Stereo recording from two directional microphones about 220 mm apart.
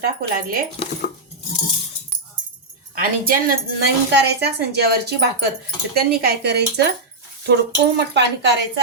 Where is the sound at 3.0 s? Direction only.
40° right (ahead or behind).